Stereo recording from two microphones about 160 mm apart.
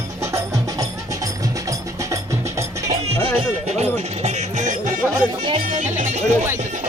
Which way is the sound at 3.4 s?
40° right (ahead or behind).